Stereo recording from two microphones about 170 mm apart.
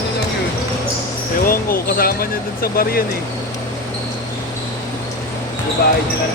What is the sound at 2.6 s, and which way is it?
Speech, 60° left (ahead or behind).